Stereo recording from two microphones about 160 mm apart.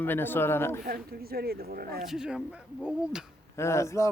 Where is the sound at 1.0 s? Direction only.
70° right (ahead or behind).